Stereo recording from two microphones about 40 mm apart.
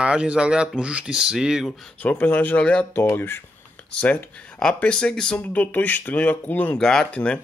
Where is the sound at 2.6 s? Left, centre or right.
Left.